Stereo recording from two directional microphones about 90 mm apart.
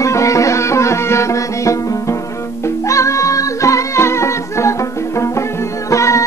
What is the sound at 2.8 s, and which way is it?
Music, 35° left (ahead or behind).